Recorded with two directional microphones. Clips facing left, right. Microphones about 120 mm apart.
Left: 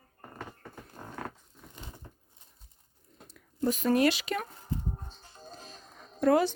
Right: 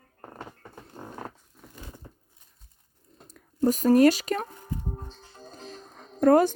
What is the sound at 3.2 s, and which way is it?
Speech, 45° right (ahead or behind).